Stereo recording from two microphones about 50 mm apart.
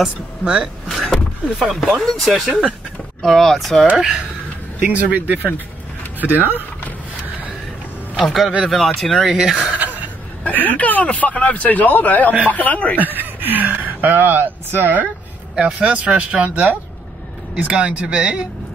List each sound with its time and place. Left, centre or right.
1.6 s speech: centre
4.8 s speech: right
8.2 s speech: centre
9.3 s speech: centre
9.7 s chuckle: right
10.4 s speech: left
13.0 s speech: right
15.5 s speech: right
16.4 s speech: right